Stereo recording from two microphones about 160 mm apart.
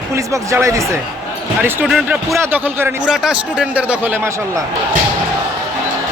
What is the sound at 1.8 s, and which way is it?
Speech, 5° right (ahead or behind).